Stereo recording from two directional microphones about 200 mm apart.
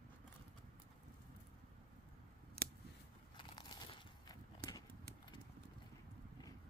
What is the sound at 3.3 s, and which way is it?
Crunch, 20° left (ahead or behind).